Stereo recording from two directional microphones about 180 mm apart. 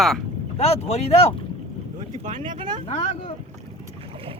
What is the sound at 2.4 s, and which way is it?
Speech, 25° right (ahead or behind).